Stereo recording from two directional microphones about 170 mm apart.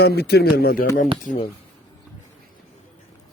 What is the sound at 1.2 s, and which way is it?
Speech, 50° left (ahead or behind).